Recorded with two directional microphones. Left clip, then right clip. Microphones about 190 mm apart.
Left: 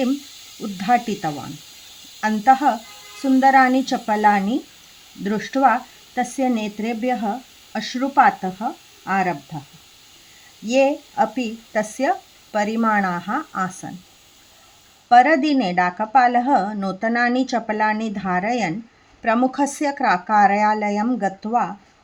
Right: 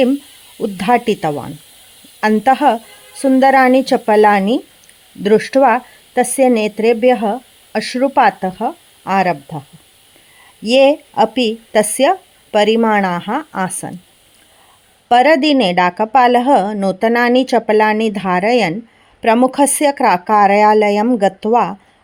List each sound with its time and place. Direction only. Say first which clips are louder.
0.8 s speech: right 5 dB; 50° right (ahead or behind)
10.7 s speech: right 7 dB; 45° right (ahead or behind)
15.1 s speech: right 4 dB; 50° right (ahead or behind)